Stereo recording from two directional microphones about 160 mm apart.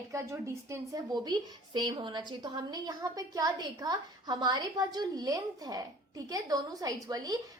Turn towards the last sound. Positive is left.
turn(degrees=-25)  # may be behind; listen again after turning